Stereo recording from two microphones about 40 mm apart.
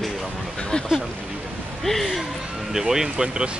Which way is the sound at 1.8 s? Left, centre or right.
Centre.